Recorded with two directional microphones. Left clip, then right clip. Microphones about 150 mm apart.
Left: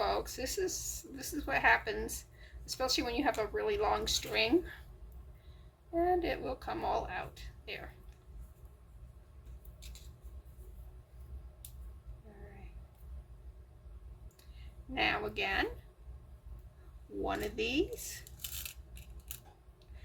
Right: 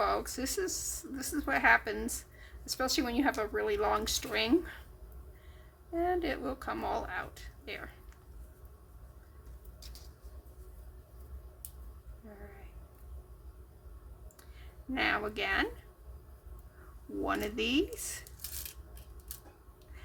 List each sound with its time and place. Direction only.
0.0 s speech: 50° right (ahead or behind)
5.9 s speech: 40° right (ahead or behind)
14.9 s speech: 40° right (ahead or behind)
17.2 s speech: 50° right (ahead or behind)